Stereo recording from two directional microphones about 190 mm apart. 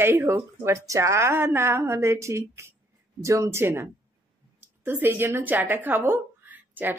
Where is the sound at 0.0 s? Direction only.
15° right (ahead or behind).